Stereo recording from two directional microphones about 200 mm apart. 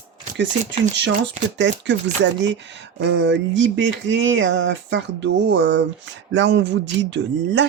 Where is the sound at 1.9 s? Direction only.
65° right (ahead or behind).